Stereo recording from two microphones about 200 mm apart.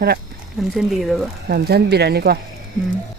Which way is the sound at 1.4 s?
55° right (ahead or behind).